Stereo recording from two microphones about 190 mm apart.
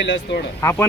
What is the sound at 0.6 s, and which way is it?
Speech, 15° left (ahead or behind).